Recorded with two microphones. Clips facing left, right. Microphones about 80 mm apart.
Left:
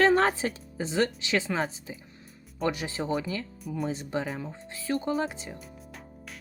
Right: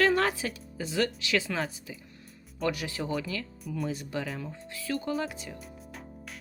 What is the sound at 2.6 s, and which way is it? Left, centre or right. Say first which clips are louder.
Speech: left 2 dB; left.